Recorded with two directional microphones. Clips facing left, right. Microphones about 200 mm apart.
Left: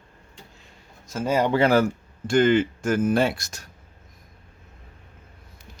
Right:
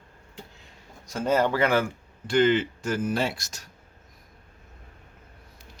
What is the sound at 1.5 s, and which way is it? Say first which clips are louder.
Speech: left 4 dB; 35° left (ahead or behind).